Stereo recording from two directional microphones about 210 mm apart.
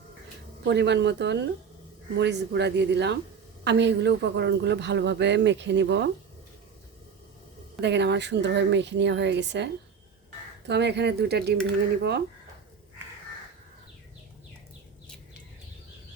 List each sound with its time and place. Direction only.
0.6 s speech: 55° right (ahead or behind)
7.8 s speech: 55° right (ahead or behind)
10.7 s speech: 55° right (ahead or behind)